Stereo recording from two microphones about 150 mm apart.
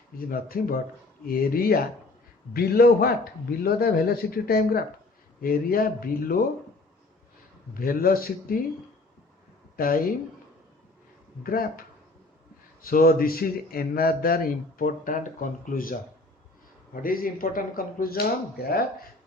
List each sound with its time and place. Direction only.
0.2 s speech: 75° left (ahead or behind)
5.4 s speech: 75° left (ahead or behind)
7.7 s speech: 70° left (ahead or behind)
9.7 s speech: 75° left (ahead or behind)
11.4 s speech: 80° left
12.8 s speech: 75° left (ahead or behind)